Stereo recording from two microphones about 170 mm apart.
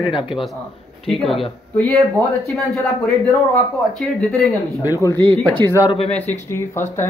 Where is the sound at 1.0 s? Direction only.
Centre (ahead or behind).